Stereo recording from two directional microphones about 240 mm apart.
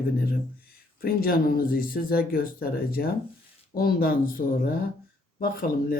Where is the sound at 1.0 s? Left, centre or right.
Left.